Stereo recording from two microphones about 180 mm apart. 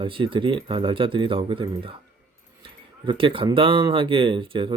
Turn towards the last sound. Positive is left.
turn(degrees=-30)  # may be behind; listen again after turning